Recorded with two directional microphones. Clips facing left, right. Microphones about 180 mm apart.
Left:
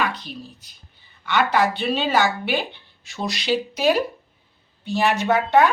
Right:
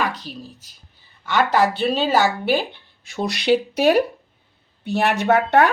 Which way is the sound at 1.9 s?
40° right (ahead or behind).